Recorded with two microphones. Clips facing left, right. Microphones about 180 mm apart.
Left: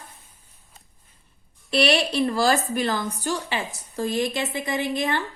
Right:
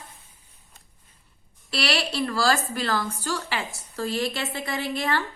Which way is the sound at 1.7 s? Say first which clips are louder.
Left 6 dB; 20° left (ahead or behind).